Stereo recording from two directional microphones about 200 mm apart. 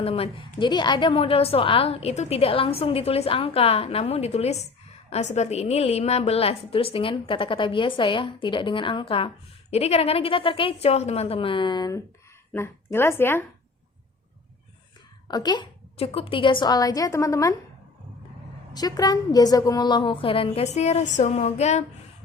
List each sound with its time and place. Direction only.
0.0 s a woman's voice: 30° left (ahead or behind); by 13.4 s 10° left (ahead or behind)
15.3 s a woman's voice: 20° left (ahead or behind)
18.7 s a woman's voice: 20° left (ahead or behind)